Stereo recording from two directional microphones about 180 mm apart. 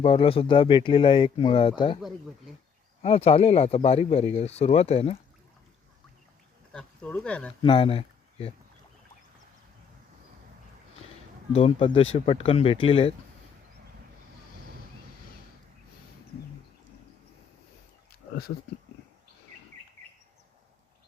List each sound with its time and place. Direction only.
0.0 s speech: 30° left (ahead or behind)
3.0 s speech: 35° left (ahead or behind)
6.7 s speech: 5° left (ahead or behind)
7.6 s speech: 30° left (ahead or behind)
11.5 s speech: 35° left (ahead or behind)
18.1 s a sound: 60° left (ahead or behind)